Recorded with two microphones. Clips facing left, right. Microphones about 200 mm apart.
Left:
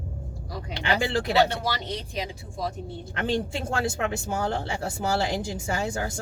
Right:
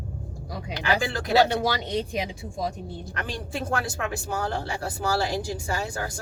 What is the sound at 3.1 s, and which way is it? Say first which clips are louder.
Speech: left 7 dB; 25° left (ahead or behind).